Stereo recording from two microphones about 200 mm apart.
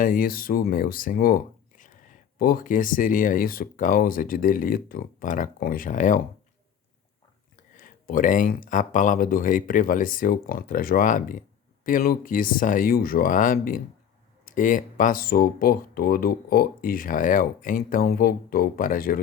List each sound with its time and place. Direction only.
0.0 s speech: 45° left (ahead or behind)
7.8 s speech: 45° left (ahead or behind)